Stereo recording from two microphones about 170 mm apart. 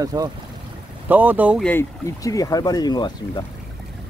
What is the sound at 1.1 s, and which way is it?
Speech, 10° right (ahead or behind).